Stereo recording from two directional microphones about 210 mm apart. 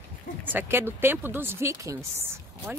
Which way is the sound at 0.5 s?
10° right (ahead or behind).